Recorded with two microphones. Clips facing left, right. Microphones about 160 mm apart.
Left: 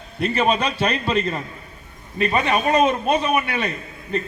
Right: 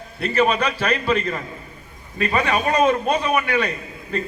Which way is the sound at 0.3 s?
25° left (ahead or behind).